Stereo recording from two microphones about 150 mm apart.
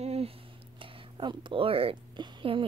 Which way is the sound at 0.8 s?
35° right (ahead or behind).